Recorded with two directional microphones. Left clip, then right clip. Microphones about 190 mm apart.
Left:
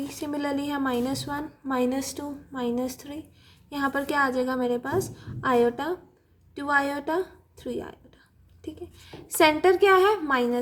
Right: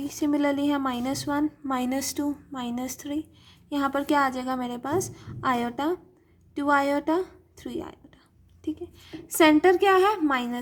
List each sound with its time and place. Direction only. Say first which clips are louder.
0.1 s a woman's voice: right 7 dB; 35° right (ahead or behind)